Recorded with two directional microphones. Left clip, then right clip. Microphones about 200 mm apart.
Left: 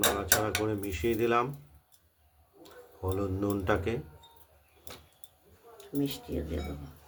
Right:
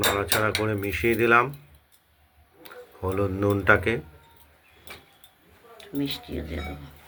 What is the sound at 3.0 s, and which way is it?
Cutlery, 10° right (ahead or behind).